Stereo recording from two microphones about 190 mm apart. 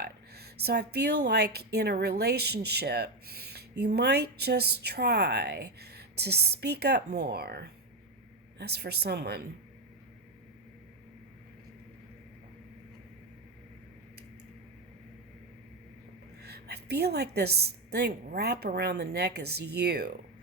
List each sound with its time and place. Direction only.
0.0 s speech: 55° right (ahead or behind)
16.4 s speech: 55° right (ahead or behind)